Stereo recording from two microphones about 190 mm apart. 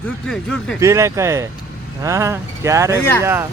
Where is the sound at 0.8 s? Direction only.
15° right (ahead or behind).